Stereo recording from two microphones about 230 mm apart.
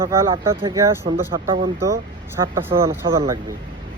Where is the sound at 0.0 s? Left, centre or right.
Centre.